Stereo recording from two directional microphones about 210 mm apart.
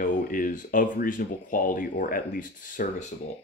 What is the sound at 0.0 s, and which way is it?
Speech, 40° left (ahead or behind).